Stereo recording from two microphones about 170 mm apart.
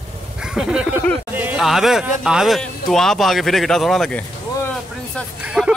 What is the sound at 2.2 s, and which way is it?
Speech, 5° right (ahead or behind).